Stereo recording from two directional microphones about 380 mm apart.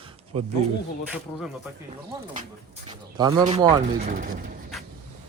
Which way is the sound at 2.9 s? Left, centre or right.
Centre.